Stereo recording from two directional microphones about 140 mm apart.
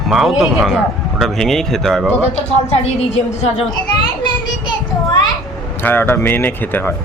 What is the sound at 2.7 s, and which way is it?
A woman's voice, 50° left (ahead or behind).